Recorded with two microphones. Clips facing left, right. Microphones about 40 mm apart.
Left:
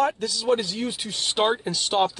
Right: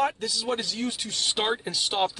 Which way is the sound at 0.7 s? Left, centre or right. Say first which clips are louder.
Left 1 dB; centre.